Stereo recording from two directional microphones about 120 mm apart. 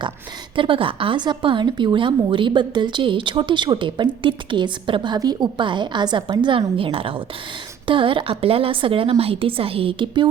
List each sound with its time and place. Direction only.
0.5 s a woman's voice: 45° right (ahead or behind)